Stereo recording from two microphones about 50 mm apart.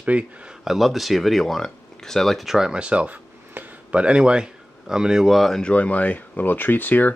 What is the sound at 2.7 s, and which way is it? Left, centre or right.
Speech, right.